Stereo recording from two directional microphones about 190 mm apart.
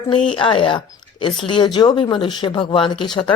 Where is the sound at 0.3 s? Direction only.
25° left (ahead or behind).